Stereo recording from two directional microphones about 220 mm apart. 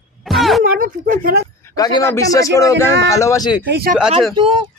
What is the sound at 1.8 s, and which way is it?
A man's voice, 15° left (ahead or behind).